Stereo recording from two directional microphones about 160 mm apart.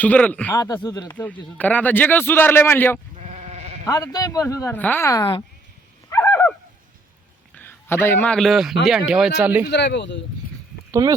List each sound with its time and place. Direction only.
0.0 s a man's voice: 10° left (ahead or behind)
0.5 s a man's voice: 20° left (ahead or behind)
1.1 s a man's voice: 10° left (ahead or behind)
3.2 s sheep: 45° right (ahead or behind)
3.8 s a man's voice: 20° left (ahead or behind)
6.1 s a sound: 15° left (ahead or behind)
7.5 s a man's voice: 10° left (ahead or behind); by 9.6 s 10° right (ahead or behind)
9.6 s speech: 90° left